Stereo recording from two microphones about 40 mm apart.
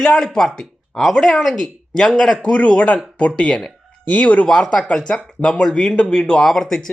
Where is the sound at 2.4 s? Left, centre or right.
Left.